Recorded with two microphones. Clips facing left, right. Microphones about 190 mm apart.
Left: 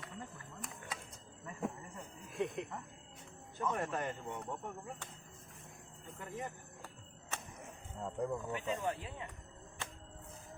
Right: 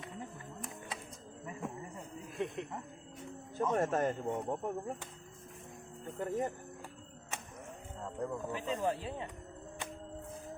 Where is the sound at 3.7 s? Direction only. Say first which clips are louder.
Right 7 dB; 45° right (ahead or behind).